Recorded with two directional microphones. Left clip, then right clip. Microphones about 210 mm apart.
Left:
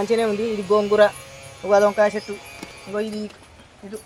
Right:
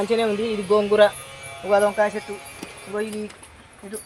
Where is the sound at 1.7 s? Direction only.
30° left (ahead or behind).